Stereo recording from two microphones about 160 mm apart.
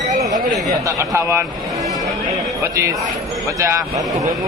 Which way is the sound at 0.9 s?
20° right (ahead or behind).